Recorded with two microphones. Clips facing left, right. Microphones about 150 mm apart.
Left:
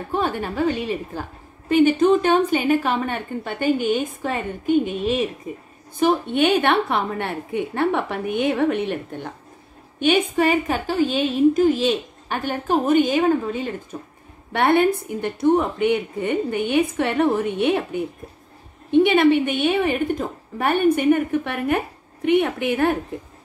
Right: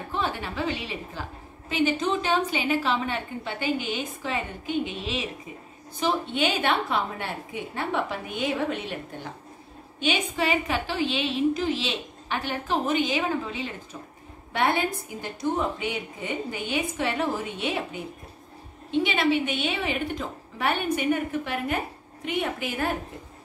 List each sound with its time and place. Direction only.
0.1 s a woman's voice: 50° left (ahead or behind)